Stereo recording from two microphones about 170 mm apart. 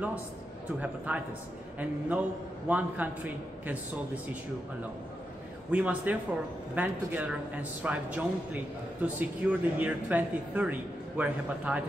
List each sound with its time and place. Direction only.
0.7 s speech: 10° right (ahead or behind)
5.7 s speech: 10° right (ahead or behind)